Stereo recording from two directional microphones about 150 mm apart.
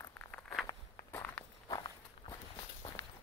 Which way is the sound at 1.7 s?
30° left (ahead or behind).